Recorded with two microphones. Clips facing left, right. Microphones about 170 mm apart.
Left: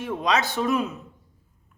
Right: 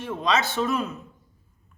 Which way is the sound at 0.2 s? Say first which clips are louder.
Right 1 dB; 15° left (ahead or behind).